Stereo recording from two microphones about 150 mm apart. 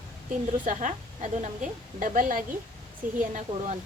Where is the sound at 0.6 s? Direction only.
55° right (ahead or behind).